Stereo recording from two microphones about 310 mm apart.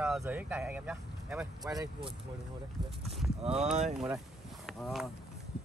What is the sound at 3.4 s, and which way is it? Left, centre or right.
Speech, centre.